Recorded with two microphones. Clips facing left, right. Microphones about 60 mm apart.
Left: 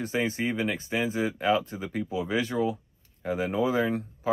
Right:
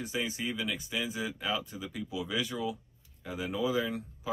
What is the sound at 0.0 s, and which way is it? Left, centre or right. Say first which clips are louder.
Speech: left 7 dB; left.